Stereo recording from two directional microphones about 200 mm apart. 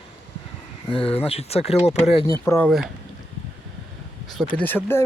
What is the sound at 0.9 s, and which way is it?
Speech, 25° left (ahead or behind).